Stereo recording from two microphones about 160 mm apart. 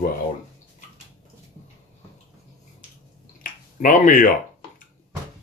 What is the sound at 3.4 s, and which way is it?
Finger snapping, 55° left (ahead or behind).